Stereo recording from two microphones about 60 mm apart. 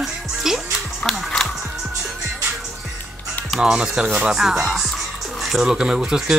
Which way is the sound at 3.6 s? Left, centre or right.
Centre.